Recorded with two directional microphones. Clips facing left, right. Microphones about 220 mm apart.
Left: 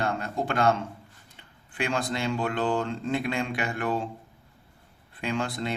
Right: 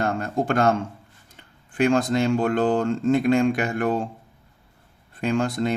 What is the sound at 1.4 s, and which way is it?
Speech, 45° right (ahead or behind).